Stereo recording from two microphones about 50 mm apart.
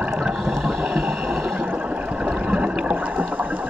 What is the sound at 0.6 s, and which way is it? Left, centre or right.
Boat, centre.